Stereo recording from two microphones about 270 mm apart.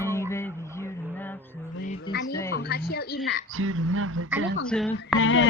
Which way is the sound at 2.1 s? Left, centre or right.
Left.